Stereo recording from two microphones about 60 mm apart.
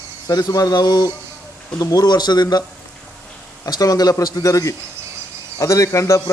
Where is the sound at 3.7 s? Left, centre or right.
Left.